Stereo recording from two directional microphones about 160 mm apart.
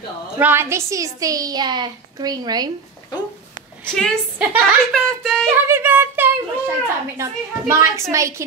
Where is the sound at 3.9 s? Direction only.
5° left (ahead or behind).